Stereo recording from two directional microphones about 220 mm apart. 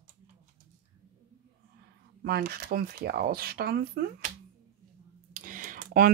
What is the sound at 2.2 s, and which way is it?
Speech, 45° right (ahead or behind).